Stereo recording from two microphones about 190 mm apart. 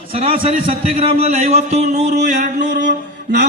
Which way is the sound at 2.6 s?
65° right (ahead or behind).